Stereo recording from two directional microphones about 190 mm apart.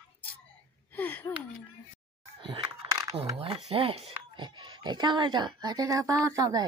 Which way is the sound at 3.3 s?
30° right (ahead or behind).